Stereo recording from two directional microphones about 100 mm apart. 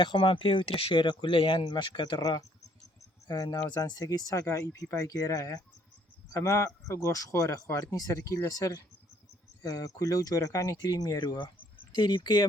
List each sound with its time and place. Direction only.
0.0 s speech: 55° left (ahead or behind)